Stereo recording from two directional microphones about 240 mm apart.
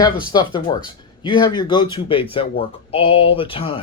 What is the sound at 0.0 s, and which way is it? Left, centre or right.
Speech, centre.